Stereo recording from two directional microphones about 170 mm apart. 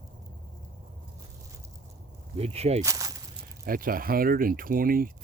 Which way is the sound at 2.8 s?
20° right (ahead or behind).